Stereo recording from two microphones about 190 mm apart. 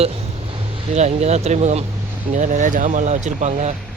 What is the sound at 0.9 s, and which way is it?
Speech, 35° right (ahead or behind).